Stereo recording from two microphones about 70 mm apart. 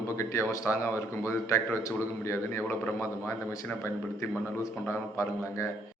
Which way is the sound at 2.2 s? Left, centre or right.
Left.